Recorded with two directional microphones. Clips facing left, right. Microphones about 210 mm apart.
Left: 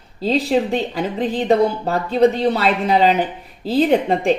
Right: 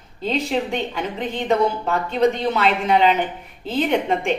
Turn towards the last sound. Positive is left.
turn(degrees=35)  # may be behind; listen again after turning